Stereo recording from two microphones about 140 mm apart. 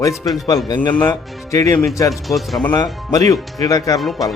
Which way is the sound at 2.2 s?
Centre (ahead or behind).